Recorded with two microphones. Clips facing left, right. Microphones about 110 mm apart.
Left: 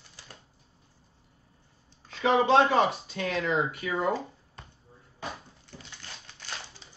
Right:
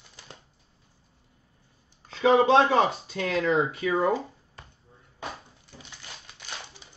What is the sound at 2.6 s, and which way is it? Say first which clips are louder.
Speech: right 2 dB; 35° right (ahead or behind).